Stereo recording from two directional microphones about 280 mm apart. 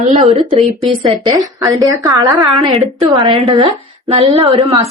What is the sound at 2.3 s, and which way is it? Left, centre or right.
A woman's voice, centre.